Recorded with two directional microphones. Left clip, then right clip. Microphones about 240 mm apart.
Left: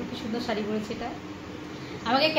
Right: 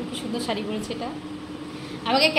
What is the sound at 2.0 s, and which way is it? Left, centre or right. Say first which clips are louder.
Speech: right 3 dB; centre.